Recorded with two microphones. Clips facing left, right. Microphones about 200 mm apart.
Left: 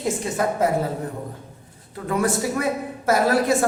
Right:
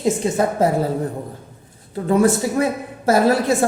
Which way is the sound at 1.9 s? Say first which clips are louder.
Right 6 dB; 25° right (ahead or behind).